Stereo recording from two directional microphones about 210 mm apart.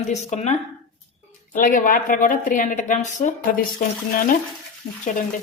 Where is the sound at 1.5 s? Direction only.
40° left (ahead or behind).